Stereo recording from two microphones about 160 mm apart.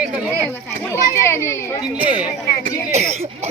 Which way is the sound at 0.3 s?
15° left (ahead or behind).